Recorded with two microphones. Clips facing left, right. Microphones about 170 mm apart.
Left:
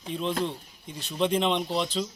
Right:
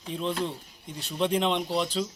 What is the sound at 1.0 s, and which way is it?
A man's voice, 10° right (ahead or behind).